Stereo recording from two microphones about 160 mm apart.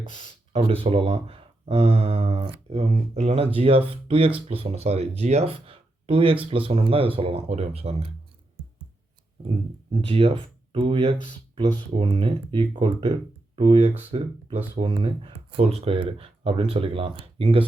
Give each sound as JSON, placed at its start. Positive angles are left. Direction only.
{"t": 0.1, "sound": "speech", "side_deg": -35}
{"t": 10.0, "sound": "speech", "side_deg": -35}